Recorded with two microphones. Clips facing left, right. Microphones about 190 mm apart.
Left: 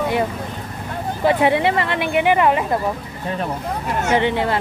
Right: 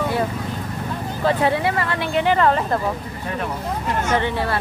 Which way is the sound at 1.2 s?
15° left (ahead or behind).